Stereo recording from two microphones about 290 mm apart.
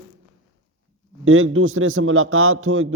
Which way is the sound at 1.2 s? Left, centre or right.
Right.